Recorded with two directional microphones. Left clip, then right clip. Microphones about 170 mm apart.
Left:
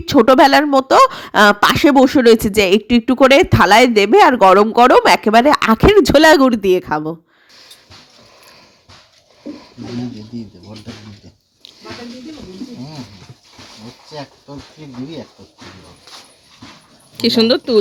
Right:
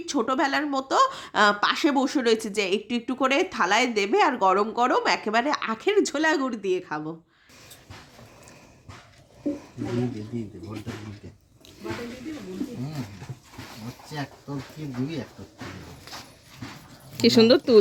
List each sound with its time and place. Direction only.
0.0 s speech: 40° left (ahead or behind)
17.2 s speech: 5° right (ahead or behind)